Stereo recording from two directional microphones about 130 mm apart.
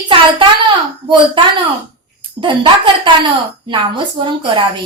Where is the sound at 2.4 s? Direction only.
40° right (ahead or behind).